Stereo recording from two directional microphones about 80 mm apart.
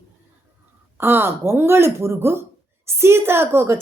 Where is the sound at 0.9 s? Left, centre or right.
Right.